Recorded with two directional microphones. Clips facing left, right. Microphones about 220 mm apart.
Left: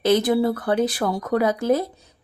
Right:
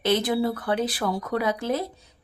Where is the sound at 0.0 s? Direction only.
40° left (ahead or behind).